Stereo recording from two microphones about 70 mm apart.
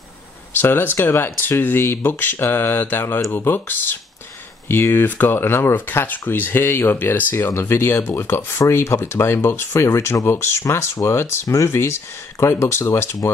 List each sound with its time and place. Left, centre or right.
0.6 s speech: left
7.5 s speech: left